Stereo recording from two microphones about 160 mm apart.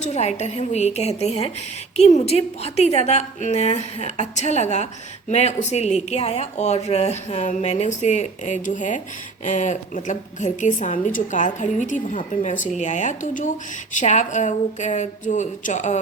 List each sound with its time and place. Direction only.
0.0 s a woman's voice: 45° left (ahead or behind)